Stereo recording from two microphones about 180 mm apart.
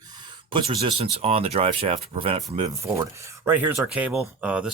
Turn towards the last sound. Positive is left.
turn(degrees=-5)  # may be behind; listen again after turning